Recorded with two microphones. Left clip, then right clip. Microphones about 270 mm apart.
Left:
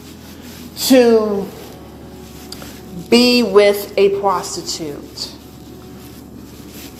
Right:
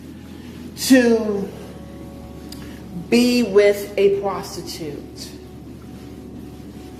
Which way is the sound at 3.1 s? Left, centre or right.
Centre.